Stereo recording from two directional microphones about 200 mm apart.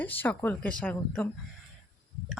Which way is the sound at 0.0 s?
10° left (ahead or behind).